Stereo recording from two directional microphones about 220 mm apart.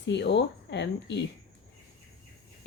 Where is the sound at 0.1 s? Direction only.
50° left (ahead or behind).